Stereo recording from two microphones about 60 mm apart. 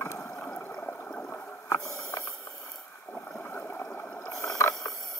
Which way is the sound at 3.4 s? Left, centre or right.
Left.